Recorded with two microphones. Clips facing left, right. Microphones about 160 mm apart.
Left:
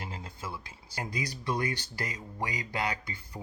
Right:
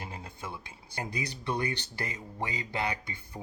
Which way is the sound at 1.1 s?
30° right (ahead or behind).